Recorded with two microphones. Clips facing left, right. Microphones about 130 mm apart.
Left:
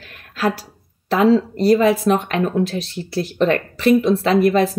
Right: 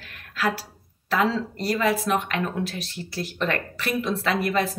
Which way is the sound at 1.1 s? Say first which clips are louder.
Left 9 dB; 25° left (ahead or behind).